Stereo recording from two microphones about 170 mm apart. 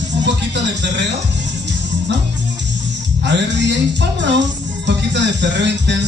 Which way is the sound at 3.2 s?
90° right.